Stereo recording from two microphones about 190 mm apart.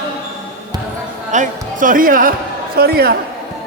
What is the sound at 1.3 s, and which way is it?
A man's voice, 40° right (ahead or behind).